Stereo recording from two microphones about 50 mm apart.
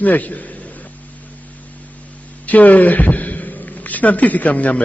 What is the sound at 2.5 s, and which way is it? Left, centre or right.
A man's voice, left.